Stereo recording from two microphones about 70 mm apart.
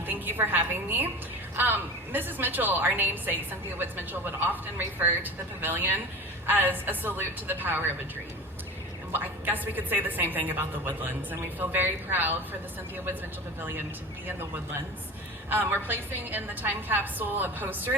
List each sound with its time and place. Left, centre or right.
0.0 s a woman's voice: right
9.1 s a woman's voice: right
15.4 s a woman's voice: right